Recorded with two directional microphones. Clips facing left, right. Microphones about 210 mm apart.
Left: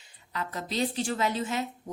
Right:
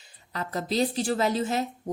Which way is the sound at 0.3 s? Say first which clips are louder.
Right 4 dB; 35° right (ahead or behind).